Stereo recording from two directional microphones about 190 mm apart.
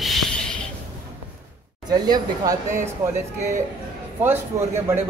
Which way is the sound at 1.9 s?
20° right (ahead or behind).